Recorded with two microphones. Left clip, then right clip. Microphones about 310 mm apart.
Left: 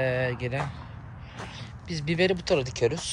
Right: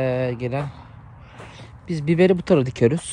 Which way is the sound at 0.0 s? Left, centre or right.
Centre.